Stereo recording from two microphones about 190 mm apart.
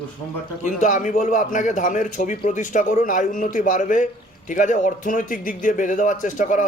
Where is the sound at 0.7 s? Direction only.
40° left (ahead or behind).